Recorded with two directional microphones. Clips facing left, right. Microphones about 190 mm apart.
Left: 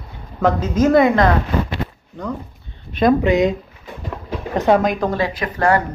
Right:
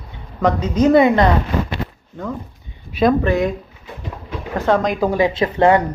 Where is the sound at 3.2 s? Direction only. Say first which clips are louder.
Left 2 dB; 20° left (ahead or behind).